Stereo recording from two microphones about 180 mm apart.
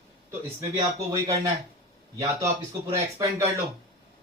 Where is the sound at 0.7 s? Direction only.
20° right (ahead or behind).